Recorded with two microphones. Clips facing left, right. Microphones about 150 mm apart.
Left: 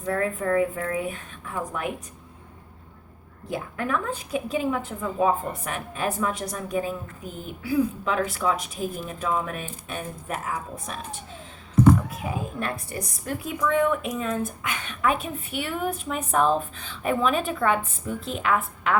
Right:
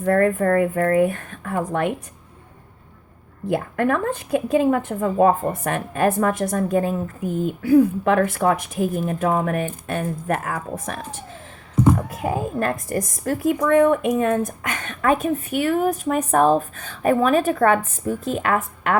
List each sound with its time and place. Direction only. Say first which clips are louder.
0.0 s a woman's voice: right 8 dB; 60° right (ahead or behind)
3.5 s a woman's voice: right 7 dB; 60° right (ahead or behind)
12.2 s a woman's voice: right 7 dB; 50° right (ahead or behind)
14.4 s a woman's voice: right 3 dB; 45° right (ahead or behind)